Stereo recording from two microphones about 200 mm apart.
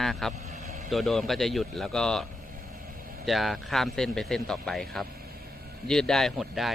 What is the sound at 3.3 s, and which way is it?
Speech, centre (ahead or behind).